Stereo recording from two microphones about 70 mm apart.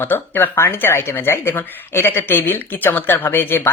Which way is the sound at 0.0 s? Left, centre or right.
Left.